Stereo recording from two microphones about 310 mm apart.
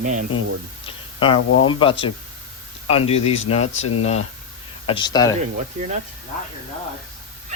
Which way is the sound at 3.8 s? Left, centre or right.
Left.